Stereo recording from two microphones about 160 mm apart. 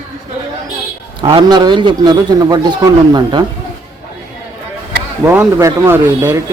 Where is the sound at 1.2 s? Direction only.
25° right (ahead or behind).